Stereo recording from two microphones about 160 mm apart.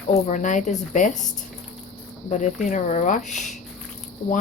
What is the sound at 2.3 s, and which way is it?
Speech, 50° left (ahead or behind).